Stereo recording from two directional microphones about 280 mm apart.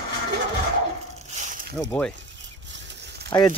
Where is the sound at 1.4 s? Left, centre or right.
Right.